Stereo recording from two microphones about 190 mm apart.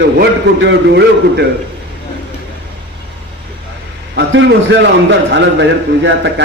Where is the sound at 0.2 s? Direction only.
65° right (ahead or behind).